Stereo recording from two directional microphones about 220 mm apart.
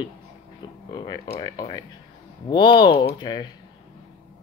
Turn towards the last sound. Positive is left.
turn(degrees=20)  # may be behind; listen again after turning